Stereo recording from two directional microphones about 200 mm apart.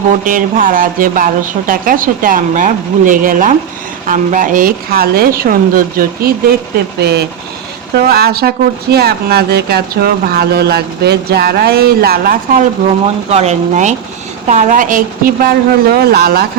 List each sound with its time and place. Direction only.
0.3 s speech: 40° right (ahead or behind)
7.0 s speech: 55° right (ahead or behind)
13.3 s speech: 35° right (ahead or behind); by 16.5 s 50° right (ahead or behind)